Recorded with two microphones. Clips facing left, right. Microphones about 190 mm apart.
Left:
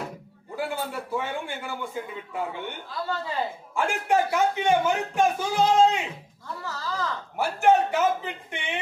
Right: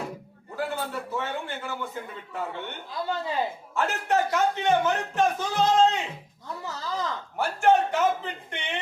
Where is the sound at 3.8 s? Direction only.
10° left (ahead or behind).